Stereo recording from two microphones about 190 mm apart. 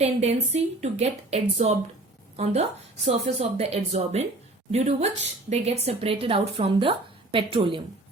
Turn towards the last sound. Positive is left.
turn(degrees=-25)  # may be behind; listen again after turning